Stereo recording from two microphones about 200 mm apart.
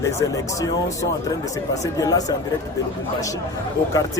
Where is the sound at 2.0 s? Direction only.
20° left (ahead or behind).